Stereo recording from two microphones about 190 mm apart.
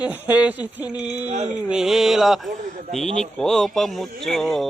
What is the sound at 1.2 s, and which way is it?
Speech, 35° right (ahead or behind).